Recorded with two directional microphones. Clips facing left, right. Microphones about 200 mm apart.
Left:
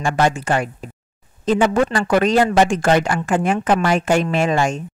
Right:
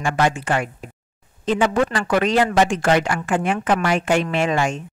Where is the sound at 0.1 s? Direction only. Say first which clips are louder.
Left 2 dB; 40° left (ahead or behind).